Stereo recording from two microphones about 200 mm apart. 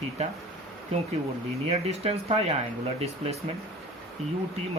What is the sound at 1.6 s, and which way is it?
Speech, 30° right (ahead or behind).